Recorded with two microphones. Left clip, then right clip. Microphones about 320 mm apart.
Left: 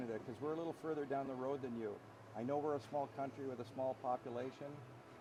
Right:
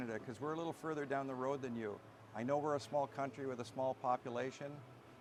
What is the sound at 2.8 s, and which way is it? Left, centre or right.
Speech, right.